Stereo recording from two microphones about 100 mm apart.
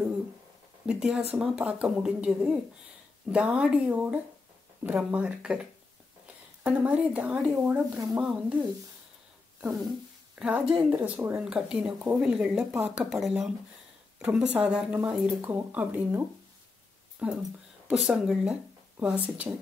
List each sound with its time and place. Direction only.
0.8 s speech: 10° right (ahead or behind)
8.1 s speech: 5° right (ahead or behind)
10.3 s speech: 10° right (ahead or behind)
11.4 s speech: 5° right (ahead or behind)